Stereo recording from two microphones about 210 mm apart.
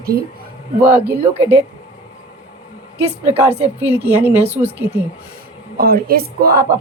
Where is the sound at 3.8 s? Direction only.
10° right (ahead or behind).